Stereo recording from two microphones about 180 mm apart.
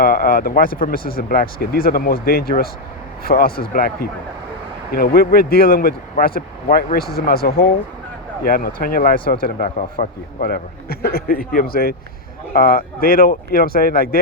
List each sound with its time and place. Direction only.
0.0 s speech: 55° left (ahead or behind)